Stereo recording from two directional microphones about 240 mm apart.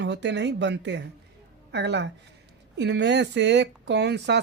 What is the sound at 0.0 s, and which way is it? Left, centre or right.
Speech, right.